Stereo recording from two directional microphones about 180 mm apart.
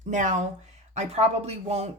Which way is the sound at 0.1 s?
45° right (ahead or behind).